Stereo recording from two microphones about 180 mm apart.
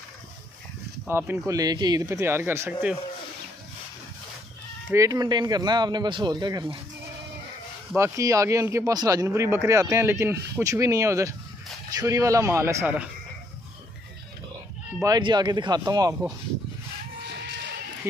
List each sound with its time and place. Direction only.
1.0 s speech: 10° right (ahead or behind)
4.9 s speech: 20° right (ahead or behind)
7.9 s speech: 15° right (ahead or behind)
15.0 s speech: 20° right (ahead or behind)